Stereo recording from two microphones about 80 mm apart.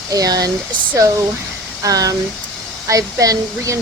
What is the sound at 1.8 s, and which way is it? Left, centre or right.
Speech, right.